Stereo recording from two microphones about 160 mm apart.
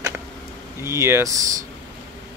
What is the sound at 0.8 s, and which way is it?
Speech, 15° right (ahead or behind).